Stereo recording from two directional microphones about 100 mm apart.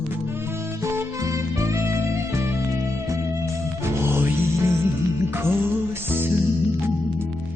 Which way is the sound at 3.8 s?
25° right (ahead or behind).